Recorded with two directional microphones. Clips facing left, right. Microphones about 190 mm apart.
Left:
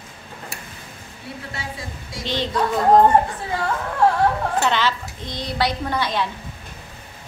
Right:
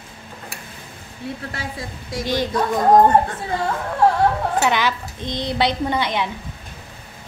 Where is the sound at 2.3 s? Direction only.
10° right (ahead or behind).